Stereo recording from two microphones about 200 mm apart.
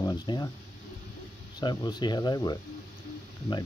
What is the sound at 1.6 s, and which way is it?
Speech, 20° left (ahead or behind).